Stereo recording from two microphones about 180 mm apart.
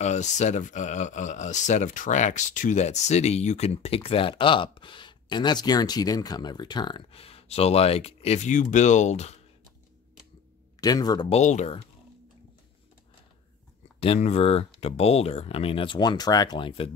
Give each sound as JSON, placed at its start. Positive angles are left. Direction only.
{"t": 0.0, "sound": "speech", "side_deg": 40}
{"t": 10.8, "sound": "speech", "side_deg": 20}
{"t": 11.2, "sound": "speech", "side_deg": 40}
{"t": 13.9, "sound": "speech", "side_deg": 35}